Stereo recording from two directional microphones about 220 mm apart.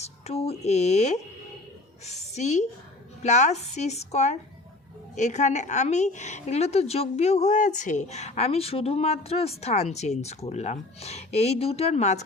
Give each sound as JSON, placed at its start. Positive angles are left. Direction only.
{"t": 0.0, "sound": "a woman's voice", "side_deg": 30}